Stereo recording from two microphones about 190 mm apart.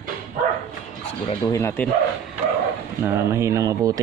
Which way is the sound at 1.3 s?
15° left (ahead or behind).